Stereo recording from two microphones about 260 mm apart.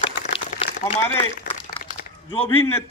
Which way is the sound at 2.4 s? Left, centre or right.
Centre.